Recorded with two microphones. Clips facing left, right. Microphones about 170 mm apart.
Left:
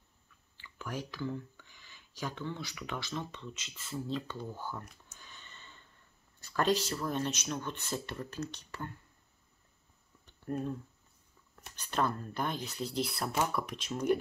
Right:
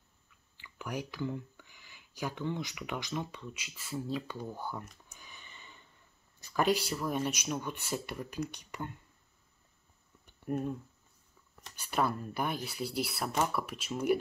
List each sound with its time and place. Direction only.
0.6 s speech: 15° right (ahead or behind)
10.2 s a sound: 10° right (ahead or behind)
11.7 s speech: 10° right (ahead or behind)